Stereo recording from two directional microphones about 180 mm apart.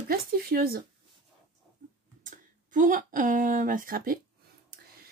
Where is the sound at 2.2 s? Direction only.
45° right (ahead or behind).